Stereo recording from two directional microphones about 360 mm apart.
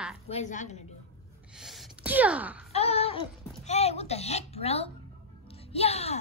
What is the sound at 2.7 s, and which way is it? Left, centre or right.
Speech, centre.